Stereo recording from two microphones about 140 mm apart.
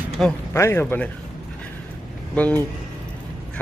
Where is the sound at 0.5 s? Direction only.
20° left (ahead or behind).